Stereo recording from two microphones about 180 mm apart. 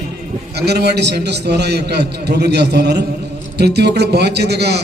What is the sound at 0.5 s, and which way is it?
A man's voice, 65° right (ahead or behind).